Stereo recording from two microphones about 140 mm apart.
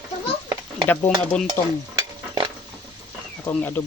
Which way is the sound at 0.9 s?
15° left (ahead or behind).